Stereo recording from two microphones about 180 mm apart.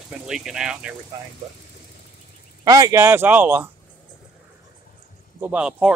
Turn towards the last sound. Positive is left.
turn(degrees=-5)  # may be behind; listen again after turning